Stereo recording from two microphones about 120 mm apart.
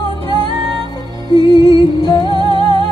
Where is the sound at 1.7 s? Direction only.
35° left (ahead or behind).